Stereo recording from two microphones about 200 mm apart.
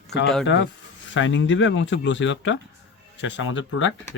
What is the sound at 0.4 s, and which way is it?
Speech, 65° left (ahead or behind).